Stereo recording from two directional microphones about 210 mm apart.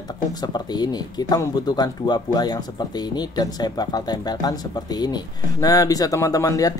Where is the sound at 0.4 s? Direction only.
20° left (ahead or behind).